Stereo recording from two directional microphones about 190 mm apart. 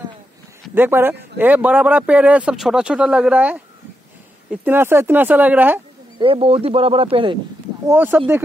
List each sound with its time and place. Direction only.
0.7 s speech: 10° right (ahead or behind)
6.1 s speech: 30° right (ahead or behind)
7.8 s speech: 10° right (ahead or behind)